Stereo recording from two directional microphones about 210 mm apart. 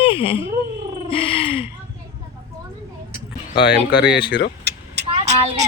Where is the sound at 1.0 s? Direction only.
25° left (ahead or behind).